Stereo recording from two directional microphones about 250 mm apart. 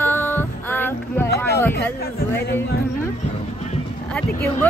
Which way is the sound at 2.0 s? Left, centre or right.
Left.